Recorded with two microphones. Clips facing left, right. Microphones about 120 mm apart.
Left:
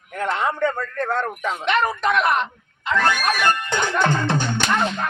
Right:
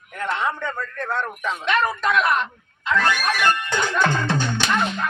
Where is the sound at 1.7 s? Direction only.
20° left (ahead or behind).